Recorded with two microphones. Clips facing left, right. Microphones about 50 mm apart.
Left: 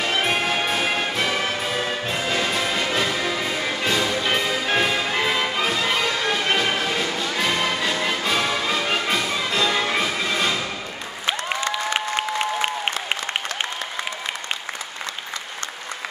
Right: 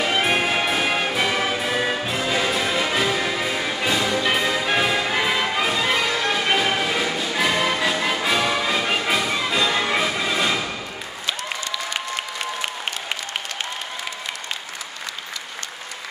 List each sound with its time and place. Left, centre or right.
0.0 s music: centre
11.2 s applause: left